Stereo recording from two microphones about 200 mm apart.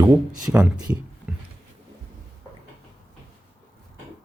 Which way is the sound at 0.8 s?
5° right (ahead or behind).